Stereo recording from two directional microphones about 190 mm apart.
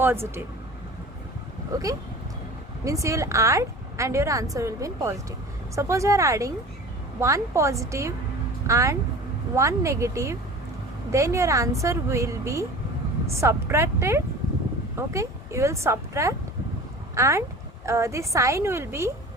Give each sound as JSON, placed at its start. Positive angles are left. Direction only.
{"t": 0.0, "sound": "a woman's voice", "side_deg": -10}
{"t": 2.8, "sound": "a woman's voice", "side_deg": -15}